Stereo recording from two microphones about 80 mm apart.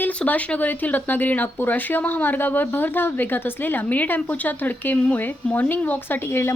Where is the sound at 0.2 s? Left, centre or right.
Centre.